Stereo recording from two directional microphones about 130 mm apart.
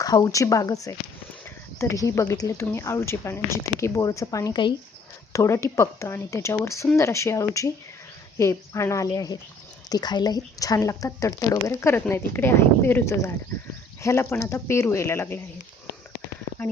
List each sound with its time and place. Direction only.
0.0 s speech: 30° left (ahead or behind)